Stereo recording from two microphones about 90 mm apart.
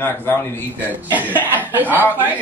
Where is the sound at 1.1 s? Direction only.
20° right (ahead or behind).